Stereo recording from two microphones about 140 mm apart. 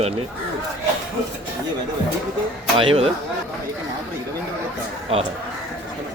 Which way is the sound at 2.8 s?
45° right (ahead or behind).